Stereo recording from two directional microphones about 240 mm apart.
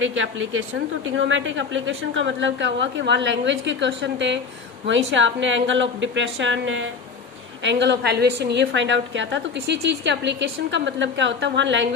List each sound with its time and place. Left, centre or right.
0.0 s a woman's voice: right